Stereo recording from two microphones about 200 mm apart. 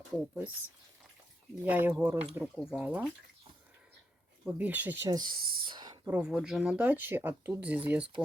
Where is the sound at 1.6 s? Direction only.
10° right (ahead or behind).